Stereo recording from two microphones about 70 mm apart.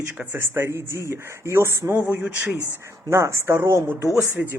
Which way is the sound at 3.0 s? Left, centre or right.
Right.